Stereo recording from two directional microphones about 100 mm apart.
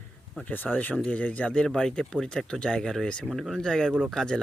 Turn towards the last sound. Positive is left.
turn(degrees=5)  # may be behind; listen again after turning